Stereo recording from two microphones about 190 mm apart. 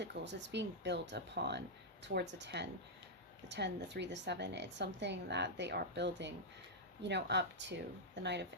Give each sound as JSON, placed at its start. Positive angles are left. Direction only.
{"t": 0.0, "sound": "a woman's voice", "side_deg": -65}